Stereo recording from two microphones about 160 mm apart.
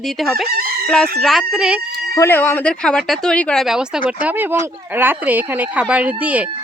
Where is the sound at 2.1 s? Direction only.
15° left (ahead or behind).